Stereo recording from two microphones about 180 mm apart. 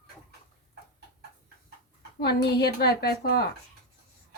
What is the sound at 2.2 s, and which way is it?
A woman's voice, 65° left (ahead or behind).